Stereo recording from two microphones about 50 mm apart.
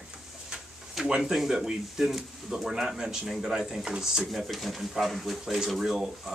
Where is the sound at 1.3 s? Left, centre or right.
Centre.